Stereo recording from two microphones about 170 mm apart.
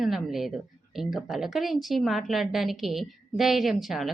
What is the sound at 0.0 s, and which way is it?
Speech, centre (ahead or behind).